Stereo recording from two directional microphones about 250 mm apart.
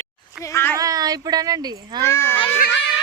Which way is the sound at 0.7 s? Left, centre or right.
Centre.